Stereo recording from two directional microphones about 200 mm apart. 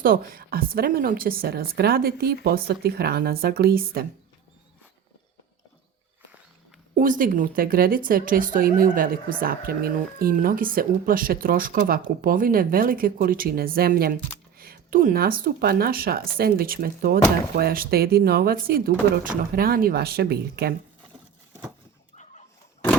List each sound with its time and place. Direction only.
0.0 s speech: 45° right (ahead or behind)
6.9 s speech: 40° right (ahead or behind)
22.1 s chicken: 35° left (ahead or behind)